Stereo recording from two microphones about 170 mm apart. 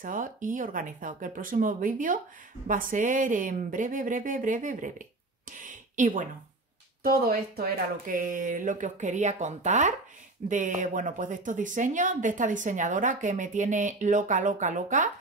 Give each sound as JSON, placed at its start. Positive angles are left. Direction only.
{"t": 0.0, "sound": "a woman's voice", "side_deg": -50}
{"t": 5.6, "sound": "a sound", "side_deg": -50}
{"t": 7.0, "sound": "a woman's voice", "side_deg": -60}